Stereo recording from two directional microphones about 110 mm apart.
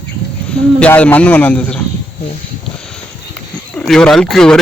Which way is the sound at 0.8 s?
10° left (ahead or behind).